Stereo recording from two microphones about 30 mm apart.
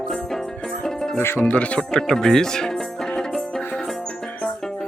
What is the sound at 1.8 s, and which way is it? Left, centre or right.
Speech, left.